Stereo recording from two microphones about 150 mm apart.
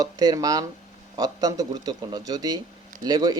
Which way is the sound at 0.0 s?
25° right (ahead or behind).